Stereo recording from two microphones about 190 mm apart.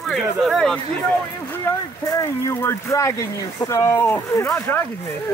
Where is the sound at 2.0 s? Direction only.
15° left (ahead or behind).